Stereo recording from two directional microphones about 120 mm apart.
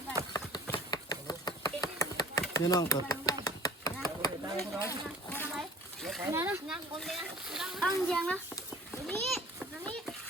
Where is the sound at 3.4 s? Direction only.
30° left (ahead or behind).